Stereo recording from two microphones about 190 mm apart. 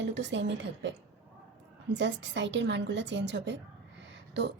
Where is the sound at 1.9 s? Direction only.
70° right (ahead or behind).